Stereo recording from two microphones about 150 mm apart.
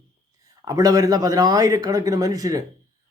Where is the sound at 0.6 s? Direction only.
25° right (ahead or behind).